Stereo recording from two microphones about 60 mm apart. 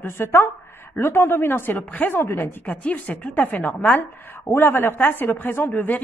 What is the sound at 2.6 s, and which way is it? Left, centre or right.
A woman's voice, left.